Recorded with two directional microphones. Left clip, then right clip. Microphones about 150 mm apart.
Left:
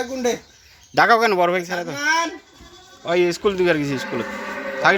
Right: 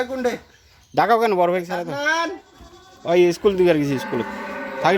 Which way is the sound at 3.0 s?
30° right (ahead or behind).